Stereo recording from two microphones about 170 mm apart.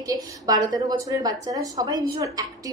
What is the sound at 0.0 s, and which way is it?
A woman's voice, 20° right (ahead or behind).